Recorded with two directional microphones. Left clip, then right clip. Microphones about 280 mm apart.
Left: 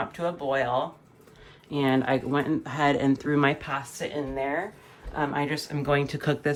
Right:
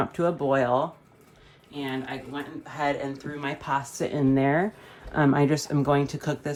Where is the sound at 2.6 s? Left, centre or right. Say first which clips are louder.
Right 2 dB; left.